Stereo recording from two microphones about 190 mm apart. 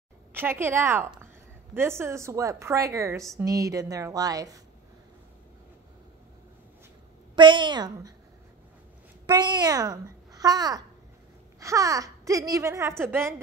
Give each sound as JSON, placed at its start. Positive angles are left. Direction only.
{"t": 0.3, "sound": "a woman's voice", "side_deg": -10}
{"t": 7.3, "sound": "a child's voice", "side_deg": -25}
{"t": 9.3, "sound": "a child's voice", "side_deg": -20}